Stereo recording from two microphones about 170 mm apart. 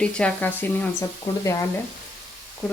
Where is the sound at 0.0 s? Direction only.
5° left (ahead or behind).